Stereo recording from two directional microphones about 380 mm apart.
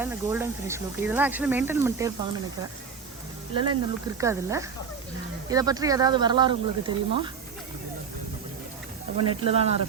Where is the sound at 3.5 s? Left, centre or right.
Centre.